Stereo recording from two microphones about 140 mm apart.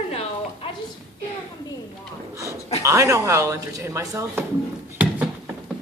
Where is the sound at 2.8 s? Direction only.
20° right (ahead or behind).